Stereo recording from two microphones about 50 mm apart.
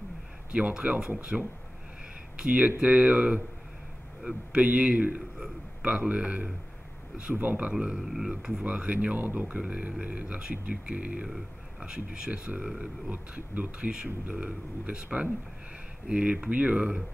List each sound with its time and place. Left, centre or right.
0.5 s speech: right
1.3 s speech: centre
2.3 s speech: centre
4.2 s speech: centre
4.6 s speech: right
7.7 s speech: centre; by 9.2 s right
9.2 s speech: right
9.6 s speech: right
12.3 s speech: right
12.6 s speech: centre
13.3 s speech: right